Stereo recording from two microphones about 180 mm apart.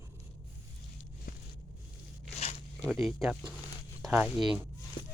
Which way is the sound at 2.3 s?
35° left (ahead or behind).